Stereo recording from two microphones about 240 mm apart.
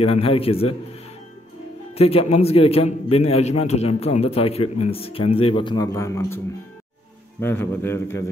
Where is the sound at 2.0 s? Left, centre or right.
Left.